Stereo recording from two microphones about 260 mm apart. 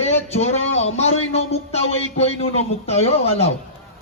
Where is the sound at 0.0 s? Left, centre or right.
Left.